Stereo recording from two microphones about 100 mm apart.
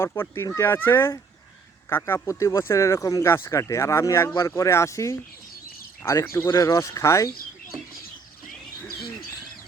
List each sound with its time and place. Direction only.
0.0 s speech: 25° left (ahead or behind)